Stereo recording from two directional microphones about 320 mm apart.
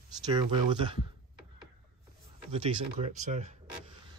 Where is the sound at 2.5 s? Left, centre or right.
Right.